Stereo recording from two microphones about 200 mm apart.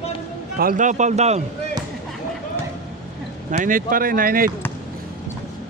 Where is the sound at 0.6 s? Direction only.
45° right (ahead or behind).